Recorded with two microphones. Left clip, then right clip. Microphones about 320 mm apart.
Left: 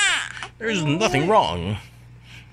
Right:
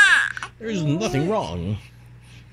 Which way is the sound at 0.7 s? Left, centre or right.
Left.